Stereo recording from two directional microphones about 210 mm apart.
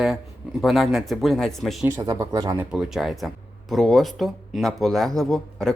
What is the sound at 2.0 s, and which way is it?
Speech, 15° right (ahead or behind).